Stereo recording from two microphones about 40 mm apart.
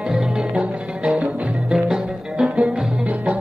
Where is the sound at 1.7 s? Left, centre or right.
Centre.